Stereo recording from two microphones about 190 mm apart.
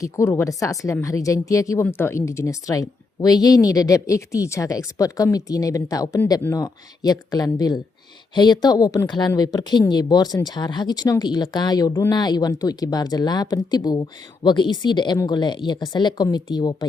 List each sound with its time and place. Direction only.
0.0 s speech: 15° left (ahead or behind)